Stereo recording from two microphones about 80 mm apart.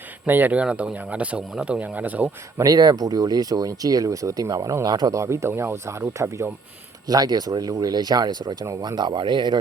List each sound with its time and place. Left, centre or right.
0.3 s speech: right
2.6 s speech: right
5.1 s speech: right
7.1 s speech: right